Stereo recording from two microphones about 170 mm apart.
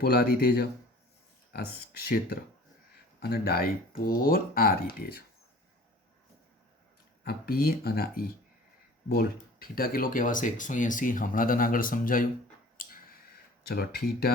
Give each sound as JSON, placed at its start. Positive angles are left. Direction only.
{"t": 0.0, "sound": "speech", "side_deg": 70}
{"t": 7.3, "sound": "speech", "side_deg": 65}
{"t": 12.7, "sound": "finger snapping", "side_deg": 55}
{"t": 13.7, "sound": "speech", "side_deg": 65}